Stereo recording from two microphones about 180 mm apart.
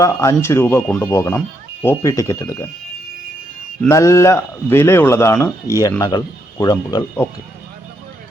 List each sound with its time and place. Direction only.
0.0 s speech: 15° left (ahead or behind)
3.8 s speech: 15° left (ahead or behind)